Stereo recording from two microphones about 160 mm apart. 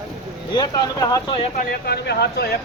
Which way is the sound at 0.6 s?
25° left (ahead or behind).